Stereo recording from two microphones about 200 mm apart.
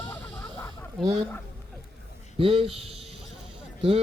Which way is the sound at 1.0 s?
25° right (ahead or behind).